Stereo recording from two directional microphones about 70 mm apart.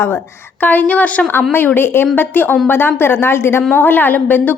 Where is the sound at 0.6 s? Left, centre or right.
Left.